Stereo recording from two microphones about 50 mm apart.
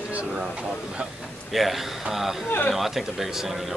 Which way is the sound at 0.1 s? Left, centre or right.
Right.